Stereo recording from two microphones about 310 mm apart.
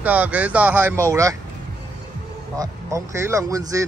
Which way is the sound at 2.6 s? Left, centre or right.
Centre.